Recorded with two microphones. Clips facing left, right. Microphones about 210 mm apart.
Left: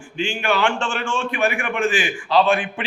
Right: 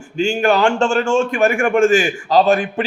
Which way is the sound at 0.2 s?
40° right (ahead or behind).